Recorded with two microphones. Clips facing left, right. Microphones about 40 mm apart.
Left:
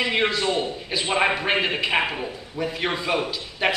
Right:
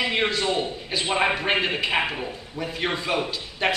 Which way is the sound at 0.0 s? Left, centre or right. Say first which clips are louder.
Left 1 dB; centre.